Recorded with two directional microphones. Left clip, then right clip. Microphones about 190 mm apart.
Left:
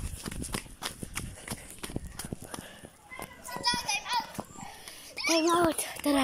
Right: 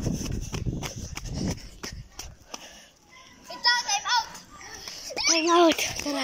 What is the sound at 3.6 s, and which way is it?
Children playing, 40° right (ahead or behind).